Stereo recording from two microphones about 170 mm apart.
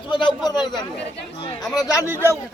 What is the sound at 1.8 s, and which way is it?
Speech, 20° left (ahead or behind).